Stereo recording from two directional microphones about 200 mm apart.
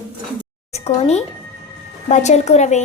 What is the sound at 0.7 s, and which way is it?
A child's voice, 30° left (ahead or behind).